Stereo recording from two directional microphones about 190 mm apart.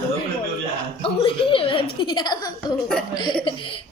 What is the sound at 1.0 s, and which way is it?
Speech, 30° left (ahead or behind).